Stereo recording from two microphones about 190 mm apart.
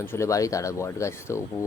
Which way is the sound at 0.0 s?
15° left (ahead or behind).